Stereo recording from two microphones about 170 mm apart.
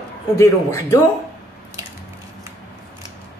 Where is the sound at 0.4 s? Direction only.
20° left (ahead or behind).